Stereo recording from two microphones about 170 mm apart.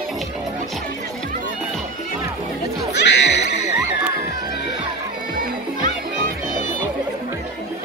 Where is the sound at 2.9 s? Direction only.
90° left.